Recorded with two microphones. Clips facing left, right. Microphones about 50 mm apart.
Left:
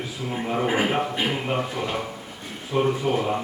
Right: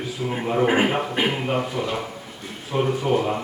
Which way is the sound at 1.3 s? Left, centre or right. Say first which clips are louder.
Right 2 dB; centre.